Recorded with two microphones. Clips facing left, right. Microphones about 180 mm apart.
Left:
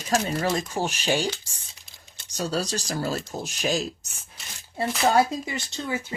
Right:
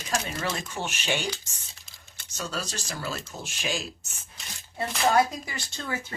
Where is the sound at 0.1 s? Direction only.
40° left (ahead or behind).